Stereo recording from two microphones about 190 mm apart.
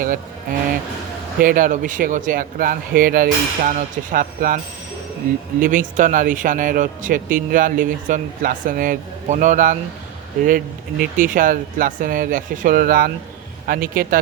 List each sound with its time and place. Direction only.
1.4 s speech: 45° right (ahead or behind)